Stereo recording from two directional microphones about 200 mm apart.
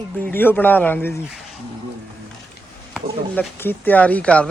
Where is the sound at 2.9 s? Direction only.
10° left (ahead or behind).